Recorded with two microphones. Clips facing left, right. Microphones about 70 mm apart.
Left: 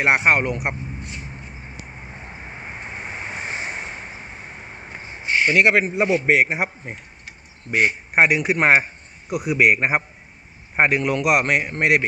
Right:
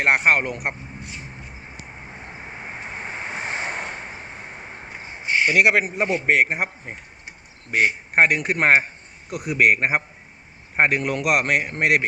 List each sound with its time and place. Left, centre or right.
0.0 s speech: centre
3.4 s vehicle: right
5.6 s a man's voice: centre